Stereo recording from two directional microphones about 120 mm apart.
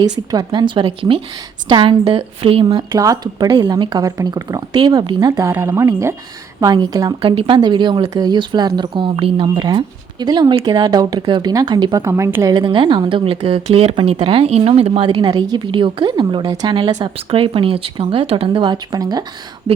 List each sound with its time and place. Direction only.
0.0 s speech: 35° right (ahead or behind)
2.9 s speech: 30° right (ahead or behind)
5.4 s speech: 20° right (ahead or behind)
7.2 s speech: 45° right (ahead or behind)
12.0 s speech: 25° right (ahead or behind)
12.5 s speech: 40° right (ahead or behind)
17.2 s speech: 45° right (ahead or behind)